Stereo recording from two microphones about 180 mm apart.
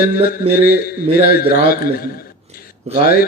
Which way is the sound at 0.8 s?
55° left (ahead or behind).